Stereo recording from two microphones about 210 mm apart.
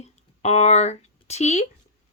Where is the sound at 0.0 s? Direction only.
30° left (ahead or behind).